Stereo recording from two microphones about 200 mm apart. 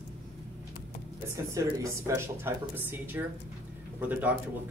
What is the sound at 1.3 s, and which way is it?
Speech, 15° right (ahead or behind).